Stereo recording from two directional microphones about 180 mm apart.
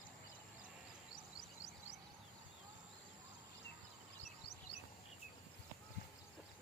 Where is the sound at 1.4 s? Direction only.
20° left (ahead or behind).